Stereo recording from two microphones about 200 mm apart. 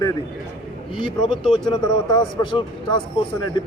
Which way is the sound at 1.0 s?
25° left (ahead or behind).